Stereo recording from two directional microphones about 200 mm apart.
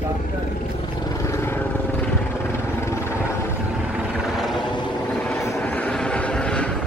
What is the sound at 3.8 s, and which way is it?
Vehicle, 5° right (ahead or behind).